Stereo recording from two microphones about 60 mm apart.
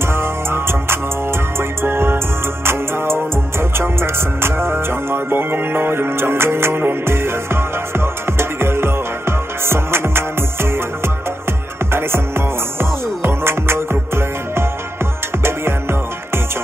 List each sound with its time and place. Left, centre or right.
0.0 s music: right
11.9 s music: right